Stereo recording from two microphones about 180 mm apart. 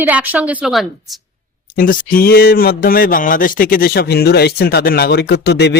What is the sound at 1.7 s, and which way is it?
Speech, 55° left (ahead or behind).